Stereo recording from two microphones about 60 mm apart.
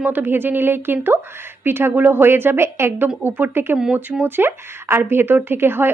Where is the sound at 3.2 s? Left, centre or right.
Right.